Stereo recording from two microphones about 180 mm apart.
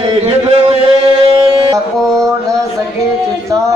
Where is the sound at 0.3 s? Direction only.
35° right (ahead or behind).